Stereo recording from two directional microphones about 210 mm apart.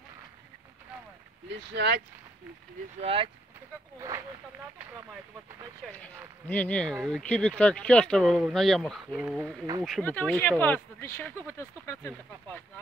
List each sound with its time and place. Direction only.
1.8 s speech: 55° right (ahead or behind)
3.0 s speech: 25° right (ahead or behind)
5.9 s speech: 10° left (ahead or behind)